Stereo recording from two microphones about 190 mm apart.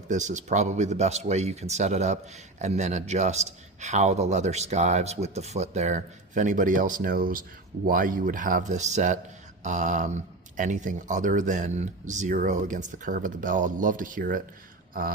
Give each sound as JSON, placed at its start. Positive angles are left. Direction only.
{"t": 0.1, "sound": "a man's voice", "side_deg": -40}